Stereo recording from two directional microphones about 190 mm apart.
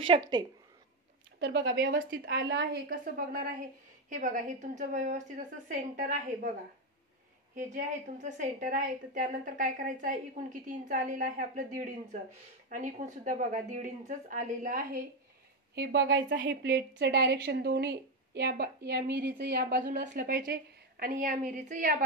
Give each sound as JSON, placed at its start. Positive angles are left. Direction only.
{"t": 1.4, "sound": "a woman's voice", "side_deg": -60}
{"t": 7.5, "sound": "a woman's voice", "side_deg": -40}
{"t": 15.7, "sound": "a woman's voice", "side_deg": -60}